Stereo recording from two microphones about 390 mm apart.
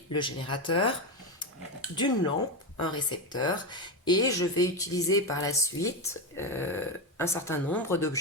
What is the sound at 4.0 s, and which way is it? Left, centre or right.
Speech, centre.